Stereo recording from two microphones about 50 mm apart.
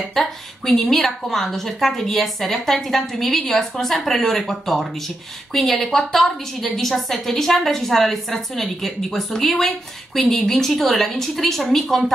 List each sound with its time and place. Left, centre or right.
0.0 s a woman's voice: centre